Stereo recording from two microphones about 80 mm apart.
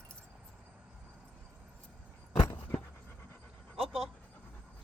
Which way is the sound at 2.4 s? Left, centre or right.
Left.